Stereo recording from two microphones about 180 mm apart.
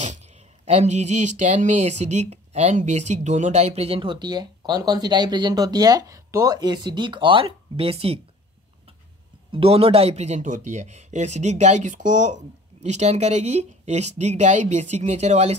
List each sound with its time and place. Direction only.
0.0 s speech: 40° right (ahead or behind)
9.5 s speech: 30° right (ahead or behind)